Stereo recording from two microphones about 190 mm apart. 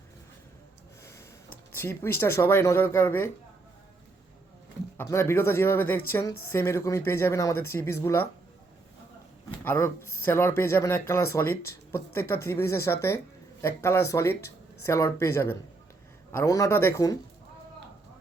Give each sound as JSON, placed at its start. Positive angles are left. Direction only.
{"t": 1.7, "sound": "speech", "side_deg": 10}
{"t": 4.9, "sound": "speech", "side_deg": 15}
{"t": 9.6, "sound": "speech", "side_deg": 10}